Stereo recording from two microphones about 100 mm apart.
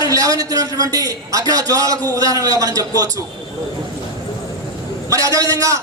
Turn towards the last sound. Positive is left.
turn(degrees=-35)  # may be behind; listen again after turning